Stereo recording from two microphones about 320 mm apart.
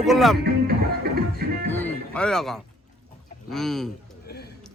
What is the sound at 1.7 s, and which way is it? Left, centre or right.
Music, centre.